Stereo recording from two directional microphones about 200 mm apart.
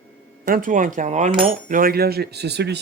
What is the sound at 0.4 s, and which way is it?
Speech, 40° right (ahead or behind).